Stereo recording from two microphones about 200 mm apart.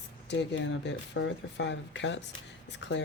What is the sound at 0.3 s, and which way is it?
Speech, 60° left (ahead or behind).